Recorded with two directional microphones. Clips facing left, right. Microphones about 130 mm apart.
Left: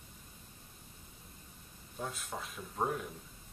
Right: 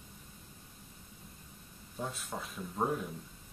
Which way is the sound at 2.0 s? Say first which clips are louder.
Right 1 dB; 5° right (ahead or behind).